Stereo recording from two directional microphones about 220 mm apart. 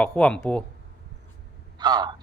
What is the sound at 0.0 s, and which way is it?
Speech, 5° left (ahead or behind).